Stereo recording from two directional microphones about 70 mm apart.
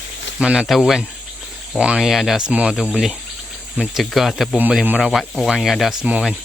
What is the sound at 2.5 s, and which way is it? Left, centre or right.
Speech, centre.